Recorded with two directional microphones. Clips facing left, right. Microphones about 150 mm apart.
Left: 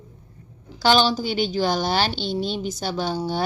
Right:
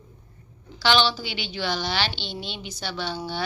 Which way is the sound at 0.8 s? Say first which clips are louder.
Left 4 dB; 45° left (ahead or behind).